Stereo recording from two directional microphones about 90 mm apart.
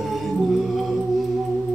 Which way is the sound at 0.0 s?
Centre (ahead or behind).